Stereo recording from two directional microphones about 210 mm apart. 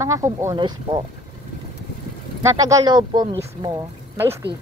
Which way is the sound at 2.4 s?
15° right (ahead or behind).